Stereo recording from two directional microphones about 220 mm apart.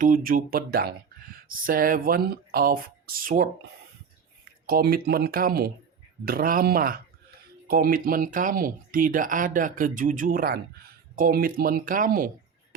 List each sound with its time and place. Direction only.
0.0 s speech: 40° right (ahead or behind)
4.6 s speech: 40° right (ahead or behind)